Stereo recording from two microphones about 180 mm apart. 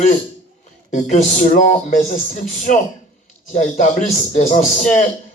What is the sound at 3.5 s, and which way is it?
Speech, 40° left (ahead or behind).